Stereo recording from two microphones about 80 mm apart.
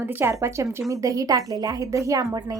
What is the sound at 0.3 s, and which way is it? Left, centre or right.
A woman's voice, right.